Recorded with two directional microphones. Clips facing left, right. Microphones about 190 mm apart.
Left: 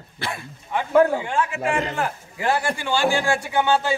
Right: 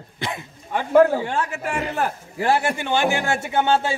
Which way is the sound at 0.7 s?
40° right (ahead or behind).